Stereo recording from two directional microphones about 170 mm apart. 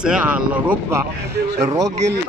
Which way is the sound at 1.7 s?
20° right (ahead or behind).